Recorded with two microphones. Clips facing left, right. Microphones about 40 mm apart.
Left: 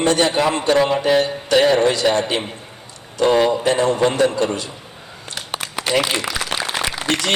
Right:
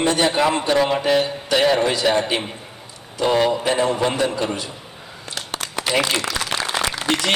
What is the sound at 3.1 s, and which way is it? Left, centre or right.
Speech, centre.